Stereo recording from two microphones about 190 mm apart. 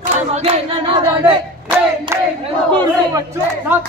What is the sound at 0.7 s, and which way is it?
Singing, 25° right (ahead or behind).